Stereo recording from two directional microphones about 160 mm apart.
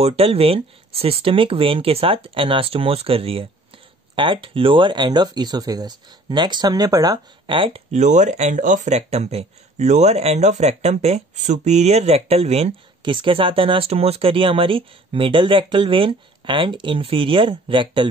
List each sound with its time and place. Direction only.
0.0 s speech: 40° right (ahead or behind)
7.9 s speech: 50° right (ahead or behind); by 18.1 s 30° right (ahead or behind)